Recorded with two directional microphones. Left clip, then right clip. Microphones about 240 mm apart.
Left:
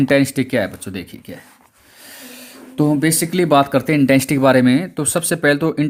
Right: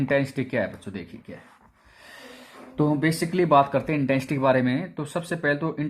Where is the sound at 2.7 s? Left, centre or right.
Left.